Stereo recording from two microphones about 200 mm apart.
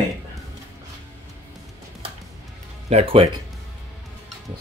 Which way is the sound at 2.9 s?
30° right (ahead or behind).